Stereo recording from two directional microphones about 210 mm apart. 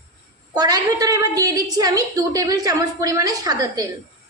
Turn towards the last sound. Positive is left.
turn(degrees=-20)  # may be behind; listen again after turning